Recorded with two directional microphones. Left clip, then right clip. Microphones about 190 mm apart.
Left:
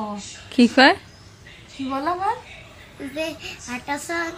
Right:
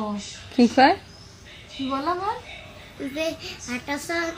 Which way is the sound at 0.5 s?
20° left (ahead or behind).